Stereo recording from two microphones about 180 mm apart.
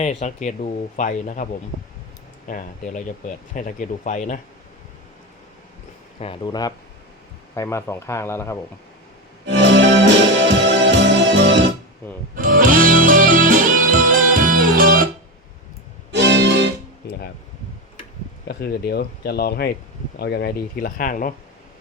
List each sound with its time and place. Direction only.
0.0 s speech: 40° left (ahead or behind)
2.5 s speech: 45° left (ahead or behind)
6.1 s speech: 30° left (ahead or behind); by 8.5 s 15° left (ahead or behind)
9.5 s music: 85° right
12.4 s music: 50° right (ahead or behind)
16.1 s music: 80° right
18.4 s speech: 65° left (ahead or behind)